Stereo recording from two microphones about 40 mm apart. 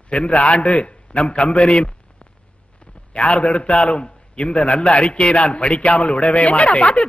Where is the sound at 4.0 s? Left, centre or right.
Centre.